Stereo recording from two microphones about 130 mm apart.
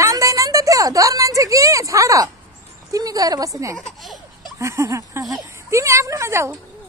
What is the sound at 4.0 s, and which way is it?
Laughter, centre (ahead or behind).